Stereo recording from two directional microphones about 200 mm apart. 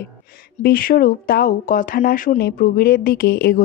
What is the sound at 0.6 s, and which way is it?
Speech, 50° left (ahead or behind).